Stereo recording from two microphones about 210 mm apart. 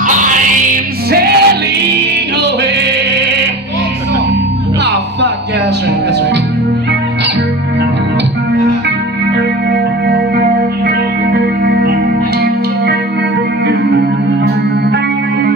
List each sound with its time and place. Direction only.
0.0 s music: 40° right (ahead or behind)
9.7 s music: 50° right (ahead or behind)